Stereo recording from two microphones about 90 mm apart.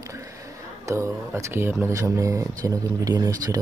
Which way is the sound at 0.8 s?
30° right (ahead or behind).